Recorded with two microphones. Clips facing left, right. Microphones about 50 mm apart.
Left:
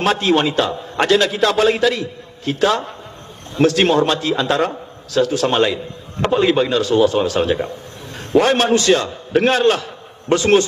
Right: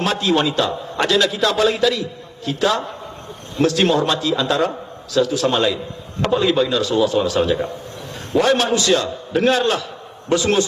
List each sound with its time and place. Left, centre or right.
0.0 s a man's voice: left